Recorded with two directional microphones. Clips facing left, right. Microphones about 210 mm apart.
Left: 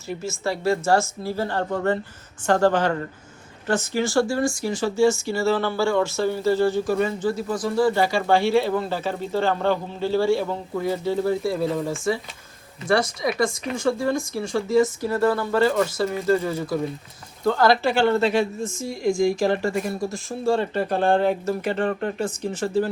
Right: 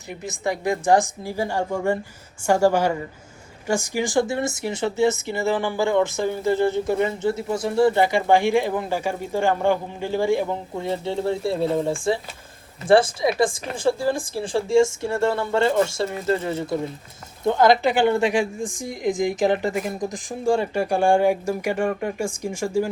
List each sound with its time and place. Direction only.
0.1 s a woman's voice: 15° right (ahead or behind)